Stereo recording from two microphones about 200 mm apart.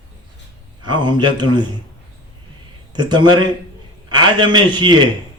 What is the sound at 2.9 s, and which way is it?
A man's voice, 20° right (ahead or behind).